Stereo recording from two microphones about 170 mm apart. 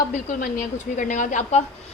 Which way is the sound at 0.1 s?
50° left (ahead or behind).